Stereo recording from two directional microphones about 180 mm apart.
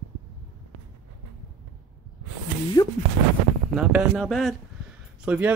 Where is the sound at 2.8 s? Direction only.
20° left (ahead or behind).